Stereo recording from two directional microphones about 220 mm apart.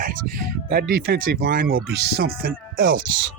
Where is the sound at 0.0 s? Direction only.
40° right (ahead or behind).